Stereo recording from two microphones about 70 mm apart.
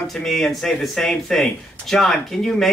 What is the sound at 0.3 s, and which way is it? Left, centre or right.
A man's voice, centre.